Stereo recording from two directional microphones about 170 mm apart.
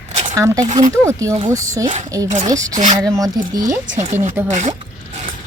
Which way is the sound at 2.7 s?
45° right (ahead or behind).